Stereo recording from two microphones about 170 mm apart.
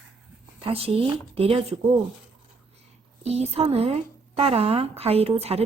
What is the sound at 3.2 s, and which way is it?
Speech, 40° right (ahead or behind).